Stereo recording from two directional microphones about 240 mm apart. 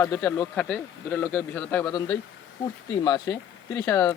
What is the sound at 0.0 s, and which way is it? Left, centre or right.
A man's voice, centre.